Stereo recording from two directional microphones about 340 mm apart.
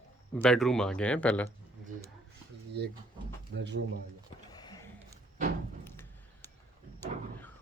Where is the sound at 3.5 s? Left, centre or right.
Right.